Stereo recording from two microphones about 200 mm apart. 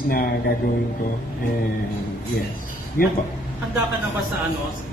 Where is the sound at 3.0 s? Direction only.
45° left (ahead or behind).